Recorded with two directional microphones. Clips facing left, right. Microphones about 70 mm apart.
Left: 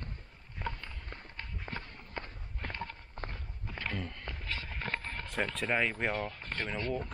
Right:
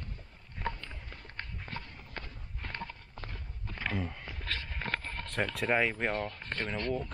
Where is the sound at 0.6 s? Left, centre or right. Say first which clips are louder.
Right 2 dB; centre.